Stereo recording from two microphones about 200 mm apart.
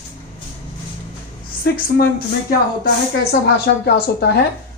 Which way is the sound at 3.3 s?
50° left (ahead or behind).